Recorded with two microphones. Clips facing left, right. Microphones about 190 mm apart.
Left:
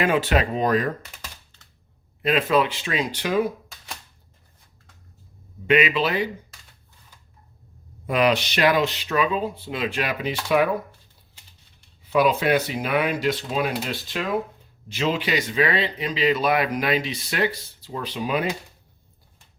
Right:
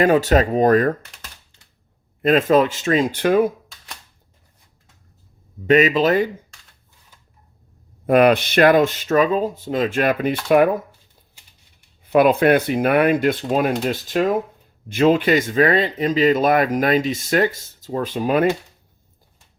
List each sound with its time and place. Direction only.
0.0 s speech: 40° right (ahead or behind)
2.2 s speech: 45° right (ahead or behind)
5.6 s speech: 45° right (ahead or behind)
8.0 s speech: 55° right (ahead or behind)
12.0 s speech: 55° right (ahead or behind)